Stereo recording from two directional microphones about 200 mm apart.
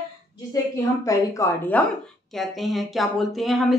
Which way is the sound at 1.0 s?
15° left (ahead or behind).